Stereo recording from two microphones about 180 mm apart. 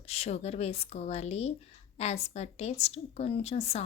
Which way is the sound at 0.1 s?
35° left (ahead or behind).